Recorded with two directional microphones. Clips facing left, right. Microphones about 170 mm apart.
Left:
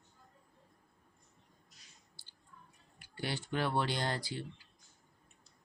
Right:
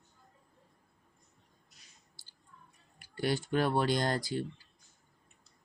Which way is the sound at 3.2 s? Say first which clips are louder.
Right 6 dB; 45° right (ahead or behind).